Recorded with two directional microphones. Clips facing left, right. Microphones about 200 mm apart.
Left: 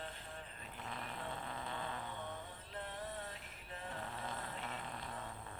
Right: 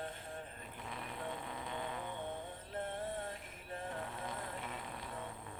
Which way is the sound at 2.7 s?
50° right (ahead or behind).